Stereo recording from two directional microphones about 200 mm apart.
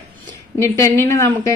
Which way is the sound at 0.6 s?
15° left (ahead or behind).